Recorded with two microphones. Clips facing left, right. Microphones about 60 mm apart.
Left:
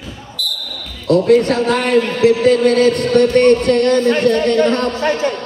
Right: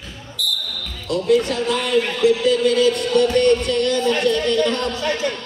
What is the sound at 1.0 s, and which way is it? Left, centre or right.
A man's voice, left.